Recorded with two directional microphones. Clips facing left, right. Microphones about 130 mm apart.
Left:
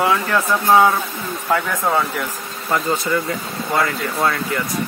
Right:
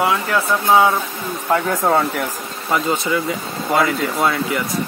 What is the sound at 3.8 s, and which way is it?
Speech, 15° right (ahead or behind).